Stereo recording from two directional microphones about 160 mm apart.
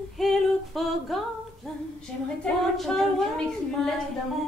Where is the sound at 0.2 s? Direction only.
Centre (ahead or behind).